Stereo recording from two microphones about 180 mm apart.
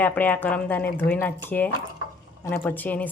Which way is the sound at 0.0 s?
10° left (ahead or behind).